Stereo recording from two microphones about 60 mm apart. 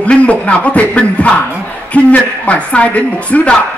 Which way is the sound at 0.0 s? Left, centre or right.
Left.